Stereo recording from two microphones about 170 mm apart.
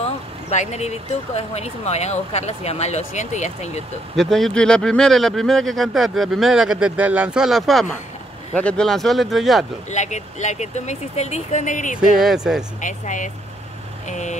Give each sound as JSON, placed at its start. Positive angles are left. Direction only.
{"t": 0.0, "sound": "speech", "side_deg": 40}
{"t": 4.2, "sound": "speech", "side_deg": 0}
{"t": 9.8, "sound": "speech", "side_deg": 45}
{"t": 12.2, "sound": "speech", "side_deg": -5}
{"t": 12.8, "sound": "speech", "side_deg": 50}